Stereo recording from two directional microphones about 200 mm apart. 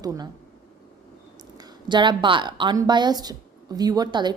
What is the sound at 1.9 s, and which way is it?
A woman's voice, 25° right (ahead or behind).